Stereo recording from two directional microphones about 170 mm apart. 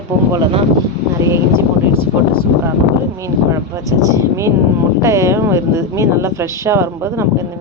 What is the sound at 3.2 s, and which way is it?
Speech, 20° right (ahead or behind).